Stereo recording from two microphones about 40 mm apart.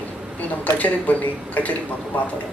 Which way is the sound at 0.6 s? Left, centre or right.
Left.